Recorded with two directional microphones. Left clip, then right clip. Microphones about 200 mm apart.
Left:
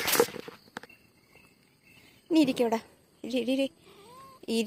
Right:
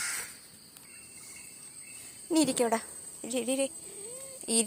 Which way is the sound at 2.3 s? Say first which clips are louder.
Left 2 dB; 10° left (ahead or behind).